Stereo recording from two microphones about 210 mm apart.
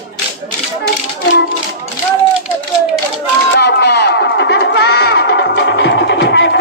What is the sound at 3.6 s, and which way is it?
Music, 50° left (ahead or behind).